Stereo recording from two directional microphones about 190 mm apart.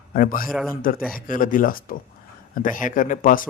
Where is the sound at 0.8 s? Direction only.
45° left (ahead or behind).